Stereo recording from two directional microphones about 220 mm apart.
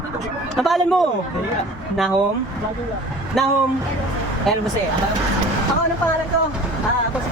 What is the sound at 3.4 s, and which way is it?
Speech, centre (ahead or behind).